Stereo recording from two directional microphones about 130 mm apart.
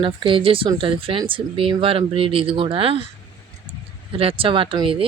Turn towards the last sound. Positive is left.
turn(degrees=-45)  # may be behind; listen again after turning